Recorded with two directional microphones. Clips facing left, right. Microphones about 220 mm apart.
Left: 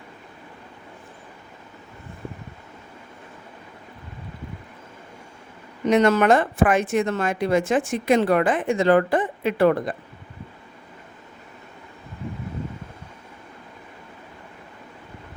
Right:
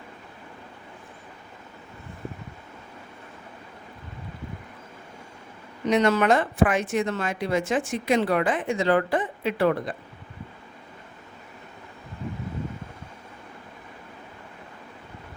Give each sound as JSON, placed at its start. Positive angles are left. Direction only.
{"t": 5.9, "sound": "speech", "side_deg": 50}